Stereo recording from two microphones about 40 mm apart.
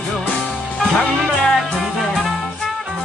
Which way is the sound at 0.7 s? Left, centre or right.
Centre.